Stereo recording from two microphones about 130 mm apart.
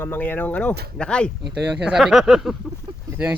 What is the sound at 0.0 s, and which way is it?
Speech, 15° left (ahead or behind).